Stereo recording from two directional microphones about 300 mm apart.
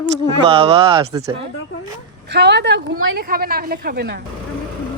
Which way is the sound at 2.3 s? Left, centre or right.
Right.